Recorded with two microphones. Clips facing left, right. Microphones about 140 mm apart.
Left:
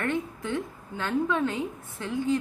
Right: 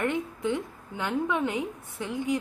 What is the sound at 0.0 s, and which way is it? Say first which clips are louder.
A woman's voice: right 1 dB; 15° right (ahead or behind).